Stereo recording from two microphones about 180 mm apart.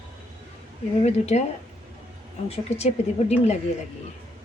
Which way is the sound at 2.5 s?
35° left (ahead or behind).